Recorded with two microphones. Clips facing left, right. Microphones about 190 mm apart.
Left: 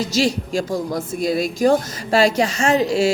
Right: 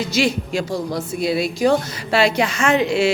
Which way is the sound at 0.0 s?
40° left (ahead or behind).